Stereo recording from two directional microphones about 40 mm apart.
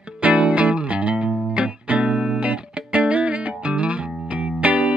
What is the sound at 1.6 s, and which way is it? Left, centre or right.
Music, right.